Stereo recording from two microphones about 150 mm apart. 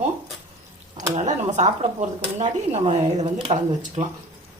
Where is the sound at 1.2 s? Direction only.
50° right (ahead or behind).